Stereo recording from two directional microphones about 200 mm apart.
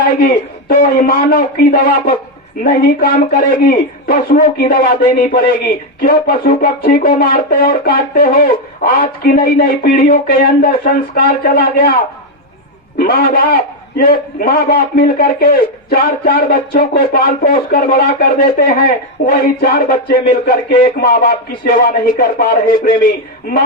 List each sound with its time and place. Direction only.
0.2 s a man's voice: 45° left (ahead or behind)
13.0 s a man's voice: 45° left (ahead or behind)